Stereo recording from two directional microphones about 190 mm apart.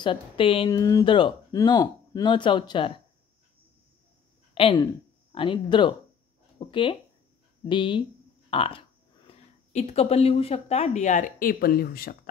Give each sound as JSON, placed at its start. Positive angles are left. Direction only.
{"t": 0.0, "sound": "speech", "side_deg": 25}
{"t": 4.6, "sound": "speech", "side_deg": 30}
{"t": 8.5, "sound": "a sound", "side_deg": 30}
{"t": 9.3, "sound": "speech", "side_deg": 35}